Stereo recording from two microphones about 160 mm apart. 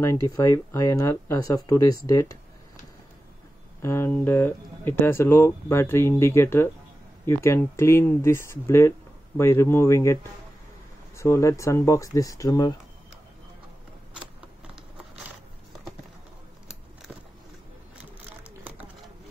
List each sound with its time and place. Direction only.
0.0 s speech: 20° left (ahead or behind)
3.8 s speech: 15° left (ahead or behind)
11.1 s speech: 20° left (ahead or behind)